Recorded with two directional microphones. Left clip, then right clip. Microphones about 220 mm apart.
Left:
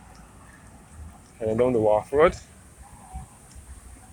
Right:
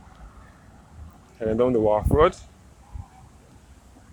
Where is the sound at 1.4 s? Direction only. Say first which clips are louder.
Right 1 dB; 20° right (ahead or behind).